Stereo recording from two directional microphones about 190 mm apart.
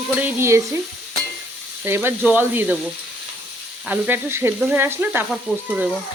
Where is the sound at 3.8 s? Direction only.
10° right (ahead or behind).